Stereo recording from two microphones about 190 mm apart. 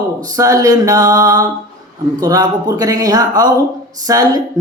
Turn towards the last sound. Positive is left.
turn(degrees=-20)  # may be behind; listen again after turning